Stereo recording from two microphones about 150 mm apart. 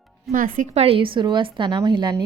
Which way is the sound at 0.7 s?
45° right (ahead or behind).